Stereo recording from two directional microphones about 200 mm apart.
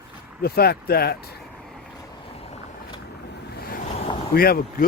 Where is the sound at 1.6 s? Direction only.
Centre (ahead or behind).